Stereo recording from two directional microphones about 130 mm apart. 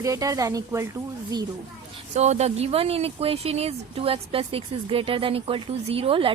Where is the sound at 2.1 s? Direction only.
60° right (ahead or behind).